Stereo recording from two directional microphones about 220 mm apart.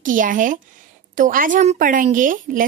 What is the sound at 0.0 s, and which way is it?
A woman's voice, 35° right (ahead or behind).